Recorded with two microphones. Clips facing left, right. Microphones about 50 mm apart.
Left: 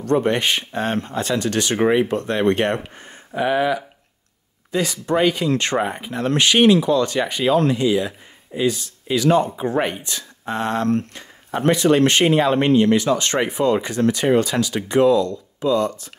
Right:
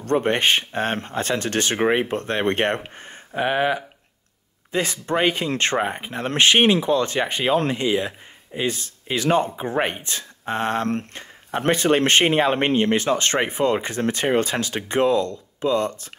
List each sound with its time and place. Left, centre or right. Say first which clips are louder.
0.0 s speech: left 1 dB; right